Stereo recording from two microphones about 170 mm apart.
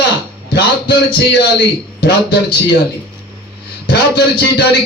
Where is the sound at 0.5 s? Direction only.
85° left.